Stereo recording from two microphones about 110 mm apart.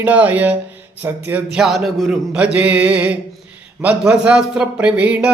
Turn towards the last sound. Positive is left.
turn(degrees=-10)  # may be behind; listen again after turning